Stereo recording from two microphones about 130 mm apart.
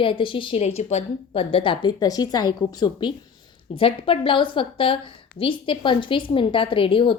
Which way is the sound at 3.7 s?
45° left (ahead or behind).